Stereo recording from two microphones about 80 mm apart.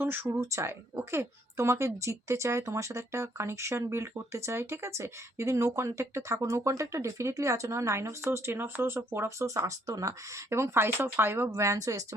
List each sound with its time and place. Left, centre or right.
0.0 s speech: right
0.3 s a woman's voice: right